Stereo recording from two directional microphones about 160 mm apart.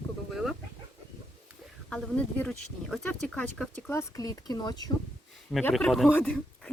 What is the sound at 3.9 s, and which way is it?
Speech, 20° left (ahead or behind).